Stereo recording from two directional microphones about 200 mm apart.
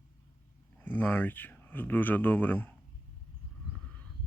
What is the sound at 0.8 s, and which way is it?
Speech, 10° left (ahead or behind).